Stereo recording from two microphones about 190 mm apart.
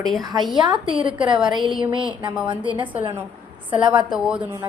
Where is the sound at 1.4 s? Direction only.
Centre (ahead or behind).